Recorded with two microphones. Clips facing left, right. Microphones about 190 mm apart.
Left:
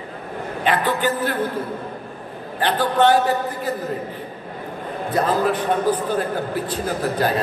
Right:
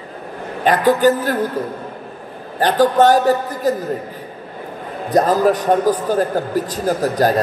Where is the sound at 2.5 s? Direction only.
40° right (ahead or behind).